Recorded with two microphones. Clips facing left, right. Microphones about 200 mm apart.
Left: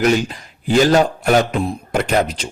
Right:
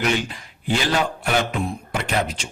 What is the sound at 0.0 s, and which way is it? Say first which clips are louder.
A man's voice: left 7 dB; 40° left (ahead or behind).